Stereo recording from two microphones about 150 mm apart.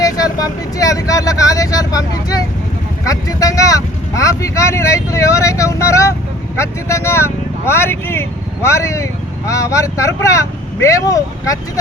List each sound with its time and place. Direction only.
0.0 s speech: 25° left (ahead or behind)